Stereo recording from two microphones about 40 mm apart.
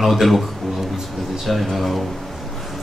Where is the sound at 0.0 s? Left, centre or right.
Centre.